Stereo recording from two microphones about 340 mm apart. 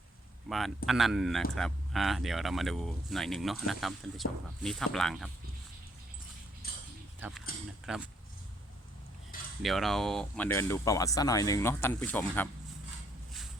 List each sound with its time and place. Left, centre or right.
0.4 s speech: centre
6.6 s a sound: left
7.2 s speech: centre
9.6 s speech: centre